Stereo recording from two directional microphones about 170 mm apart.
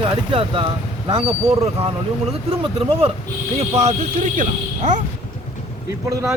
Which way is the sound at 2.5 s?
35° right (ahead or behind).